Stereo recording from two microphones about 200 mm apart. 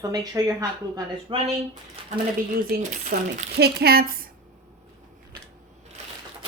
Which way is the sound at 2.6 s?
45° right (ahead or behind).